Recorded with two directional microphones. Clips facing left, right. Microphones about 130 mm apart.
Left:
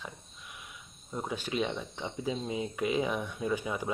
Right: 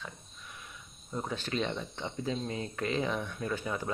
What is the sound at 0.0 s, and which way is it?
Speech, 10° left (ahead or behind).